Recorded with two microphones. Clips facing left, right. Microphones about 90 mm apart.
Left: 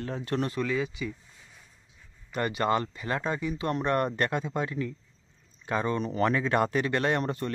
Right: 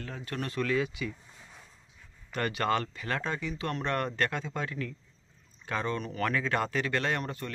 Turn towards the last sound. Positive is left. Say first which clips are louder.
# left 5 dB
turn(degrees=30)  # may be behind; listen again after turning